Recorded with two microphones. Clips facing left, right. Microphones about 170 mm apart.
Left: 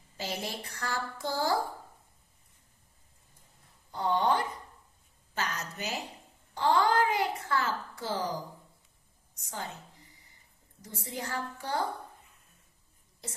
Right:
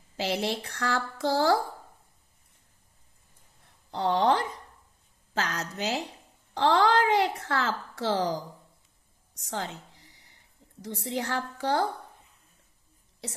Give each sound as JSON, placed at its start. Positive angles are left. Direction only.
{"t": 0.2, "sound": "a woman's voice", "side_deg": -80}
{"t": 3.9, "sound": "speech", "side_deg": -85}
{"t": 9.4, "sound": "a woman's voice", "side_deg": -90}